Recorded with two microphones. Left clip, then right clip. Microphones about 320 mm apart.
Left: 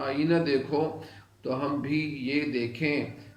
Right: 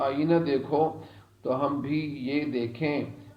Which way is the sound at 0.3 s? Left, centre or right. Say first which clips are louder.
Left 1 dB; centre.